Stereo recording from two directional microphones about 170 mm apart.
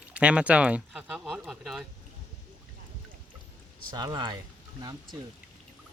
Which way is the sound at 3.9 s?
25° right (ahead or behind).